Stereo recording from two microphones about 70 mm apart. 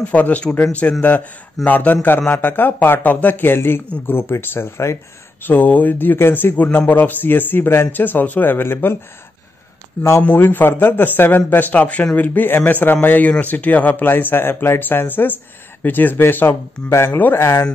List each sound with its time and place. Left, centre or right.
0.0 s speech: left
5.4 s speech: left
10.2 s speech: left